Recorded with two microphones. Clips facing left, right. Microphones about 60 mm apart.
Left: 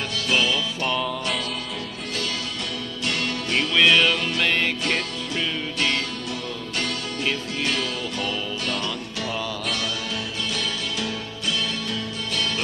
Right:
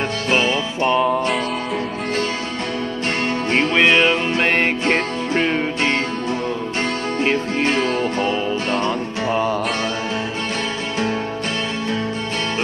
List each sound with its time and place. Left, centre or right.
0.3 s music: right
3.5 s music: right
7.2 s music: right